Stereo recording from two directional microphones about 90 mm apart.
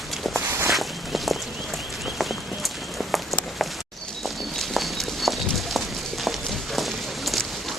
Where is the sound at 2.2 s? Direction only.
Centre (ahead or behind).